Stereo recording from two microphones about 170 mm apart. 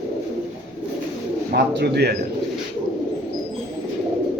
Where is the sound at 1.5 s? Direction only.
75° right (ahead or behind).